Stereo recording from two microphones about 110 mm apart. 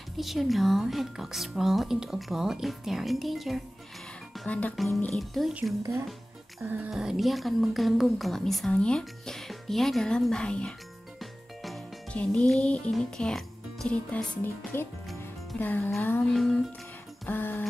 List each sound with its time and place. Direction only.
0.2 s a woman's voice: centre (ahead or behind)
4.5 s speech: 15° left (ahead or behind)
4.7 s a woman's voice: centre (ahead or behind)
6.6 s speech: 15° right (ahead or behind)
6.9 s a woman's voice: 5° right (ahead or behind)
11.1 s music: centre (ahead or behind)
12.1 s speech: 10° left (ahead or behind)
16.0 s music: 20° left (ahead or behind)
16.3 s a woman's voice: centre (ahead or behind)
17.3 s speech: 15° left (ahead or behind)